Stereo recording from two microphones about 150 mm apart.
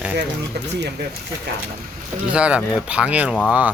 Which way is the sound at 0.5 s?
90° right.